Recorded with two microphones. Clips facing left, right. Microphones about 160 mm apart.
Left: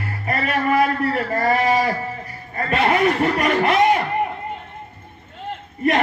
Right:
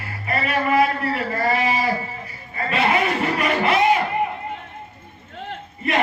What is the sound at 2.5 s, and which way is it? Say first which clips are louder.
Chuckle: left 2 dB; 45° left (ahead or behind).